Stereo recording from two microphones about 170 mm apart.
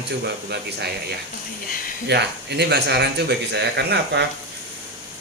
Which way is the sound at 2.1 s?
80° right.